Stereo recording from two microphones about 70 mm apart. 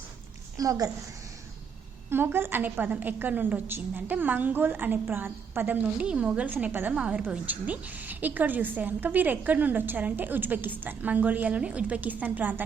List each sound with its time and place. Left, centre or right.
0.5 s a woman's voice: right
2.0 s a woman's voice: right
6.1 s a woman's voice: centre
6.9 s a woman's voice: centre